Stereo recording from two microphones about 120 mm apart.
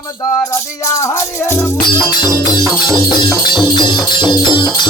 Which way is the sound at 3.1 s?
40° left (ahead or behind).